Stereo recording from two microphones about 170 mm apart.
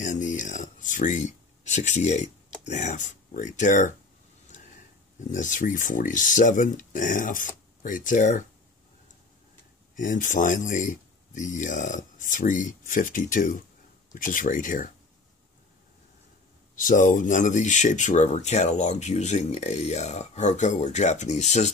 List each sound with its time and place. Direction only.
0.0 s speech: 45° left (ahead or behind)
5.3 s speech: 50° left (ahead or behind)
9.9 s speech: 50° left (ahead or behind)
16.7 s speech: 50° left (ahead or behind)